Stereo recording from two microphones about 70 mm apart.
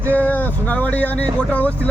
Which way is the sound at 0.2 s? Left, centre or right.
Left.